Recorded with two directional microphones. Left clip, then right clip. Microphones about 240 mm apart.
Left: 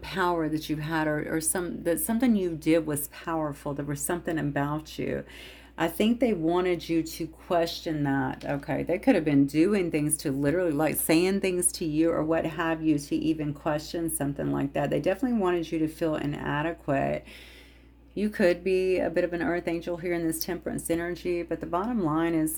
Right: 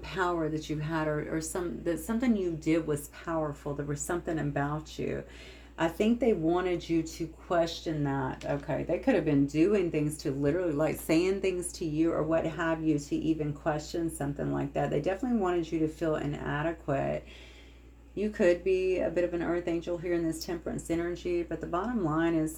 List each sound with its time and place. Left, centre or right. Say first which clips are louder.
0.1 s speech: left 3 dB; left
18.2 s speech: left 2 dB; left